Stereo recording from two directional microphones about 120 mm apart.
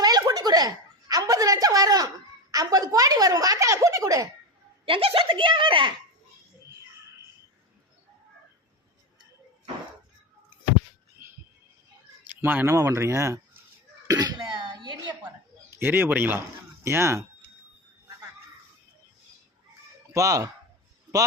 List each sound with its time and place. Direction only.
0.0 s a sound: 35° right (ahead or behind)
2.5 s speech: 30° right (ahead or behind)
4.9 s speech: 50° right (ahead or behind)
12.3 s speech: 15° right (ahead or behind)
14.1 s cough: 35° right (ahead or behind)
15.7 s speech: 15° right (ahead or behind)
20.1 s speech: 25° right (ahead or behind)